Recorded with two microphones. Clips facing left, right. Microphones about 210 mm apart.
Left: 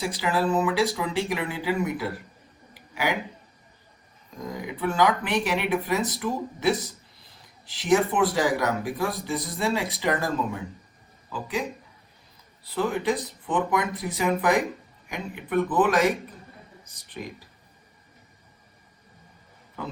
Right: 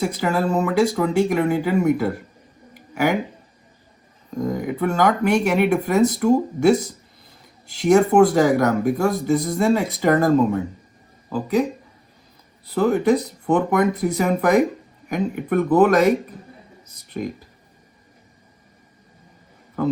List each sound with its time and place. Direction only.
0.0 s speech: 45° right (ahead or behind)
2.7 s a sound: 45° right (ahead or behind)
4.4 s speech: 50° right (ahead or behind)
12.7 s speech: 45° right (ahead or behind)
19.8 s speech: 50° right (ahead or behind)